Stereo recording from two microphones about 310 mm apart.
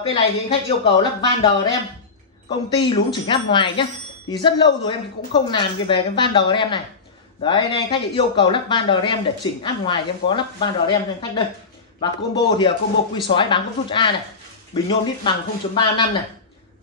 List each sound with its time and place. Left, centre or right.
0.1 s speech: centre
4.8 s speech: centre